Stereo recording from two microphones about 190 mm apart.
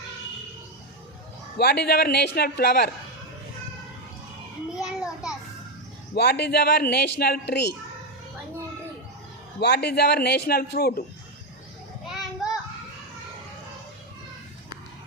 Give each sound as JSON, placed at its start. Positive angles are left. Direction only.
{"t": 1.5, "sound": "a man's voice", "side_deg": 60}
{"t": 4.7, "sound": "children playing", "side_deg": 0}
{"t": 6.1, "sound": "a man's voice", "side_deg": 60}
{"t": 9.6, "sound": "a man's voice", "side_deg": 60}